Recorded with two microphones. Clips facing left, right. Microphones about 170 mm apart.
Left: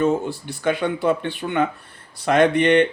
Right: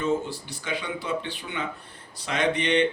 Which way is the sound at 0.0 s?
55° left (ahead or behind).